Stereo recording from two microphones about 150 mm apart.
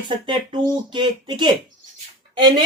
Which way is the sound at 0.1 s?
35° right (ahead or behind).